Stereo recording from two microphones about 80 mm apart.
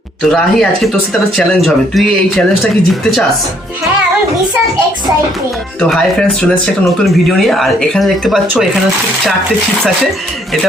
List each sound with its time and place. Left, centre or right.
0.3 s speech: centre
7.0 s speech: centre